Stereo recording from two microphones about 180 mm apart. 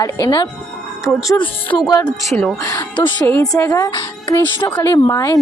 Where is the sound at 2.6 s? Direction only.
20° left (ahead or behind).